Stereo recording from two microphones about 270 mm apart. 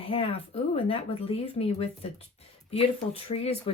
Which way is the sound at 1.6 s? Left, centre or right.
Left.